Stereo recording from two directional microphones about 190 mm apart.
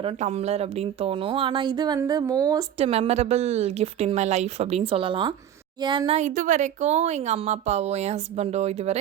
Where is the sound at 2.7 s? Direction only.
30° right (ahead or behind).